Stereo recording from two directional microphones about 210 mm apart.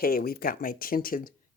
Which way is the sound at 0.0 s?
45° left (ahead or behind).